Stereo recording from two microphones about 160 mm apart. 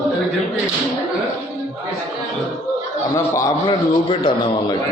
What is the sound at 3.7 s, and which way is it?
Speech, 35° left (ahead or behind).